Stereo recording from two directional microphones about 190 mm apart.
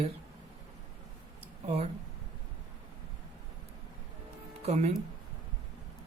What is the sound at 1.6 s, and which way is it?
Speech, 35° right (ahead or behind).